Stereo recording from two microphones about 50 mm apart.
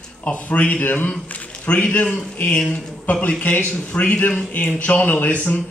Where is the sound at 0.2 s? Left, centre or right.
Left.